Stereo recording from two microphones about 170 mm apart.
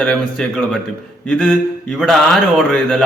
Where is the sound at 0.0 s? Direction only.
5° left (ahead or behind).